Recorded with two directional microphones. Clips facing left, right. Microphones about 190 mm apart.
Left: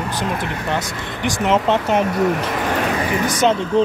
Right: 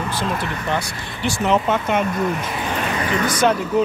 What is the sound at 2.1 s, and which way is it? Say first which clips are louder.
Speech: left 4 dB; 70° left (ahead or behind).